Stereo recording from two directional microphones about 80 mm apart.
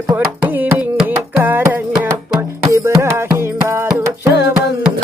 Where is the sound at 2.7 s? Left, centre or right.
Right.